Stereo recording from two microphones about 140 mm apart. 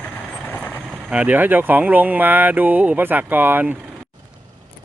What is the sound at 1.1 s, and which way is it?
Speech, 10° right (ahead or behind).